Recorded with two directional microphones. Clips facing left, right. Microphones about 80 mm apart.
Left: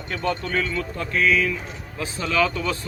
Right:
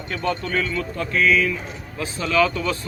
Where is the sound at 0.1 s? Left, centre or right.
Centre.